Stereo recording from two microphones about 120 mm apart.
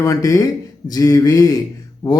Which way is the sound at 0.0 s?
30° left (ahead or behind).